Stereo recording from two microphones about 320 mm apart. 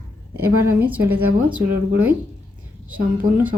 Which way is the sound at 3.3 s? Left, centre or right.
Centre.